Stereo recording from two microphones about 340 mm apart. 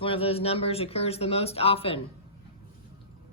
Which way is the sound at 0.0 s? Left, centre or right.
Centre.